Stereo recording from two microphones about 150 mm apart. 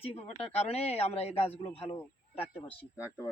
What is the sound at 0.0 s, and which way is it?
Speech, 45° left (ahead or behind).